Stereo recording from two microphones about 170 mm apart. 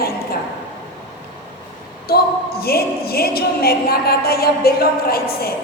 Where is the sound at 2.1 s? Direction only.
65° left (ahead or behind).